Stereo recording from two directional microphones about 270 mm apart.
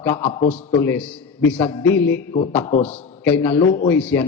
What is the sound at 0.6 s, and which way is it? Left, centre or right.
A man's voice, centre.